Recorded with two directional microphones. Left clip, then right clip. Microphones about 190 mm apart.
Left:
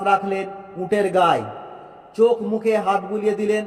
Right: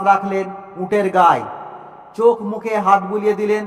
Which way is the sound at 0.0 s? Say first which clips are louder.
Right 4 dB; 5° right (ahead or behind).